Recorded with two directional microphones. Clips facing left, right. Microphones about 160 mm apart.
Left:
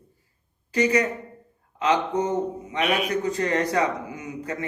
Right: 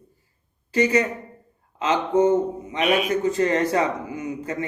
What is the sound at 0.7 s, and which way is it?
A man's voice, 30° right (ahead or behind).